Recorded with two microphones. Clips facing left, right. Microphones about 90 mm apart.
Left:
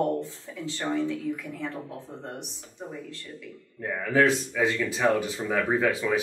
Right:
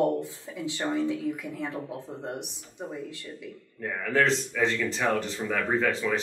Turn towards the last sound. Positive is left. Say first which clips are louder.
# left 2 dB
turn(degrees=5)  # may be behind; listen again after turning